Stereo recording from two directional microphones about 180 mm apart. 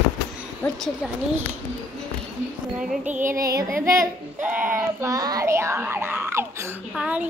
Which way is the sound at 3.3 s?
20° right (ahead or behind).